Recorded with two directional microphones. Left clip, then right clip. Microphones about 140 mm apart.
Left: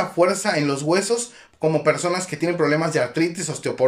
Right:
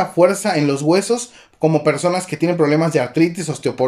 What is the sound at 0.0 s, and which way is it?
Speech, 20° right (ahead or behind).